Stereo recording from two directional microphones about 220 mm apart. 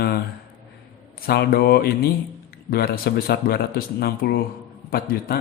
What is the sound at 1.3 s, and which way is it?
Speech, 45° left (ahead or behind).